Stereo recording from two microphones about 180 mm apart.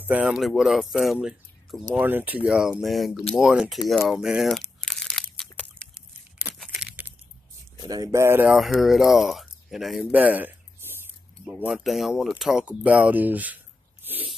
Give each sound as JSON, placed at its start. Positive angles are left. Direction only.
{"t": 0.1, "sound": "speech", "side_deg": -5}
{"t": 3.9, "sound": "crumpling", "side_deg": 0}
{"t": 5.8, "sound": "a sound", "side_deg": -5}
{"t": 7.9, "sound": "speech", "side_deg": -20}
{"t": 8.5, "sound": "speech", "side_deg": 0}
{"t": 14.0, "sound": "a sound", "side_deg": -10}